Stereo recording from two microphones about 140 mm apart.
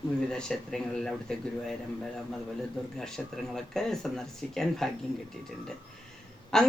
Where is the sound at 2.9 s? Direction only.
5° left (ahead or behind).